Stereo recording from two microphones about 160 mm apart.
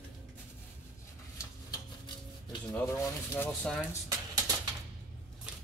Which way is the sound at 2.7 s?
15° left (ahead or behind).